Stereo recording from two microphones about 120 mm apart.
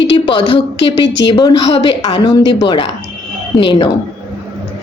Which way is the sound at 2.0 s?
35° left (ahead or behind).